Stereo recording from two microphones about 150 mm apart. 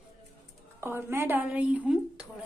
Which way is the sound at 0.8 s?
15° right (ahead or behind).